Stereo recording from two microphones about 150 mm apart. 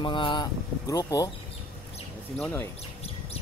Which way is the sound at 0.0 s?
35° left (ahead or behind).